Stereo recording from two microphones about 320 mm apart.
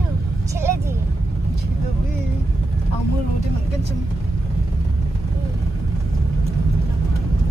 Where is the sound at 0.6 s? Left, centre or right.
Centre.